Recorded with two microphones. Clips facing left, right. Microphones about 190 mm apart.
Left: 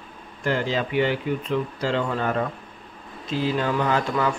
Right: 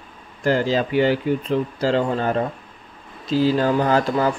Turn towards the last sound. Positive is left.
turn(degrees=-35)  # may be behind; listen again after turning